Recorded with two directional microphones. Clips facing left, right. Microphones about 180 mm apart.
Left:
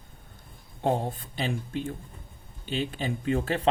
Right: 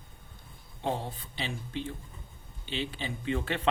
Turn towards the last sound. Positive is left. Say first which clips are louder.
# left 5 dB
turn(degrees=40)  # may be behind; listen again after turning